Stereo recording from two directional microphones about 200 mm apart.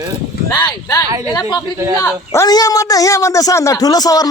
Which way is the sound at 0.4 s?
20° left (ahead or behind).